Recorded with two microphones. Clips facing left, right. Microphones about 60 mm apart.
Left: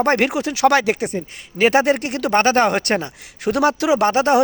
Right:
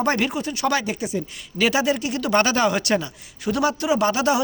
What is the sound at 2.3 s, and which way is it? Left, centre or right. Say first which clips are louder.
Speech: left 4 dB; left.